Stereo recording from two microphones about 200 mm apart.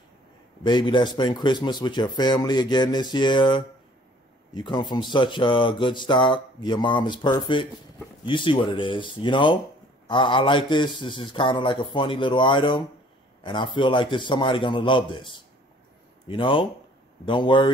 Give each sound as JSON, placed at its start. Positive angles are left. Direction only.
{"t": 0.7, "sound": "speech", "side_deg": 20}